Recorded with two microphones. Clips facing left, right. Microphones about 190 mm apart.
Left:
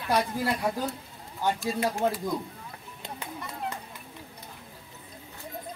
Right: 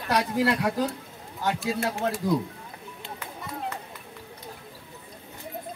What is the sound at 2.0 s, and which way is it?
Speech, 15° left (ahead or behind).